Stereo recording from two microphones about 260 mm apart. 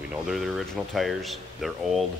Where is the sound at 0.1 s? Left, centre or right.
Centre.